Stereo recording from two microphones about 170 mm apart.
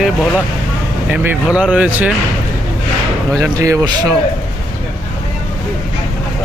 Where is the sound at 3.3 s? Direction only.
20° right (ahead or behind).